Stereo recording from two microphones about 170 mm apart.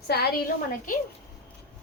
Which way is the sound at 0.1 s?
70° left (ahead or behind).